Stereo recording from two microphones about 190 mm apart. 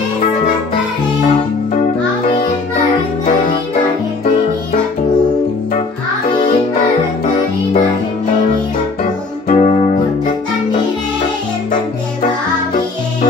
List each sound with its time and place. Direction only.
9.5 s music: 35° left (ahead or behind)